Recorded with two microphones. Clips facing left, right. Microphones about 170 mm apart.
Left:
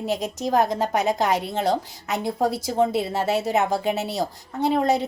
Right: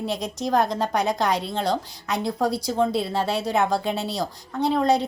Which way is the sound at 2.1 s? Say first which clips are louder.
Left 1 dB; 25° left (ahead or behind).